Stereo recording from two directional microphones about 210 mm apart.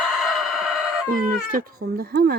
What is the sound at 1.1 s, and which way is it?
Speech, 45° right (ahead or behind).